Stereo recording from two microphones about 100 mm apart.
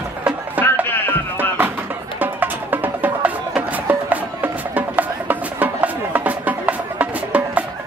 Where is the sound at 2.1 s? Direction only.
20° right (ahead or behind).